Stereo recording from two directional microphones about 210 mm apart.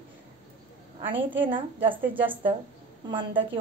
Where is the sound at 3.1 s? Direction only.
25° right (ahead or behind).